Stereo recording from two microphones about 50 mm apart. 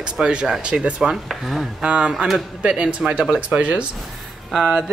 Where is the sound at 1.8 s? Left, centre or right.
Centre.